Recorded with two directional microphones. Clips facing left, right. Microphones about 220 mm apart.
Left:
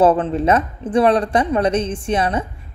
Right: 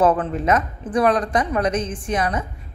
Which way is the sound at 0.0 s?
30° left (ahead or behind).